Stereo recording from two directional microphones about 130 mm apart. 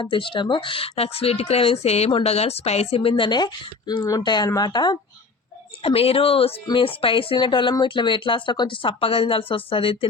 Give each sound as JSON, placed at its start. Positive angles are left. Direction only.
{"t": 0.0, "sound": "speech", "side_deg": 40}
{"t": 5.8, "sound": "speech", "side_deg": 50}